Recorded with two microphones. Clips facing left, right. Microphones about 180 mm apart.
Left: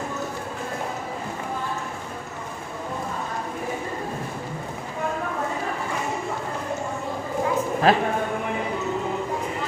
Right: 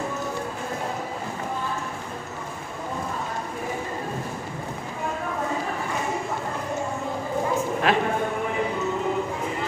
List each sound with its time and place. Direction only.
7.9 s a man's voice: 35° left (ahead or behind)